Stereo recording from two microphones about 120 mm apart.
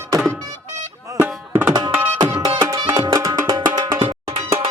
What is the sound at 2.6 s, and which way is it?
Music, 35° right (ahead or behind).